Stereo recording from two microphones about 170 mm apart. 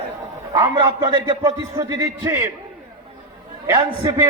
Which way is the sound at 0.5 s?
20° right (ahead or behind).